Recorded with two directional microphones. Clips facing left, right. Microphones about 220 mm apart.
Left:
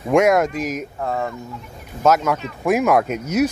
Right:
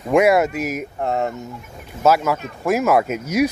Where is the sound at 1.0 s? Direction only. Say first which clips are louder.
Right 3 dB; 25° right (ahead or behind).